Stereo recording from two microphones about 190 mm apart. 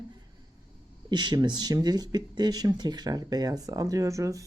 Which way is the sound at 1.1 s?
25° right (ahead or behind).